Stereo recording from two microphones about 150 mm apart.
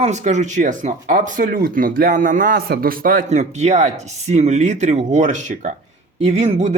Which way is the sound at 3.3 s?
50° right (ahead or behind).